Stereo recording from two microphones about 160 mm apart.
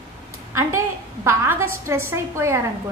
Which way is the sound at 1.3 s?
15° right (ahead or behind).